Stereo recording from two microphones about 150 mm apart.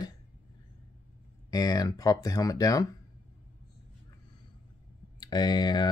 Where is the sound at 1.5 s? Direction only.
25° left (ahead or behind).